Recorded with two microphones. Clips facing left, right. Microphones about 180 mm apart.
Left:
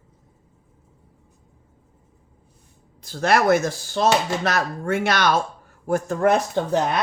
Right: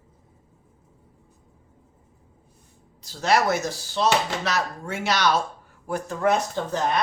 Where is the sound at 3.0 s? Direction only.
55° left (ahead or behind).